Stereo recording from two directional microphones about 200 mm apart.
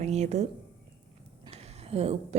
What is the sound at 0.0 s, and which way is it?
Speech, 35° right (ahead or behind).